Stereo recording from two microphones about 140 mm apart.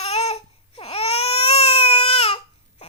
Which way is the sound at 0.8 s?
45° left (ahead or behind).